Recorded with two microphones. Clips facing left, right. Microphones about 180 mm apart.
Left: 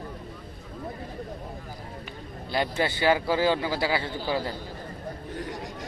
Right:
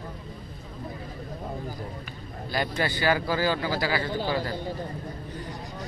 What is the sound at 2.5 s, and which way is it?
Speech, 25° left (ahead or behind).